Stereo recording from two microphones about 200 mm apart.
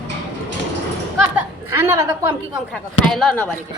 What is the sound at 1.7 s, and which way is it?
Speech, 15° right (ahead or behind).